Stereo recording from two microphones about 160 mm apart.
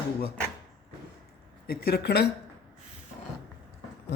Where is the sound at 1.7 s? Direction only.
80° left.